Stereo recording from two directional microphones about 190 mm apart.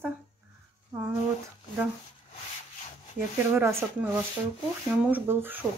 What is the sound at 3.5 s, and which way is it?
Speech, 10° right (ahead or behind).